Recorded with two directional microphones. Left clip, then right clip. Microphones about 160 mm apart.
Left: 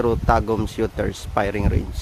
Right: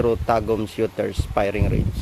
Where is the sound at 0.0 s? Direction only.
15° left (ahead or behind).